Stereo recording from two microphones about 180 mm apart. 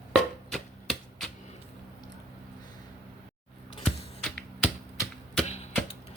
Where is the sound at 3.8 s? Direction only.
5° left (ahead or behind).